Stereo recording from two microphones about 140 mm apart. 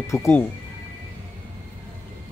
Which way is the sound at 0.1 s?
20° left (ahead or behind).